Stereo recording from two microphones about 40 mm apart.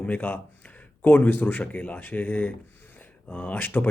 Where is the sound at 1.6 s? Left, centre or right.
Left.